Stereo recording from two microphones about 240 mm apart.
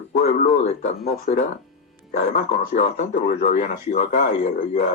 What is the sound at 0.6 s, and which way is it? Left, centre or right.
Speech, left.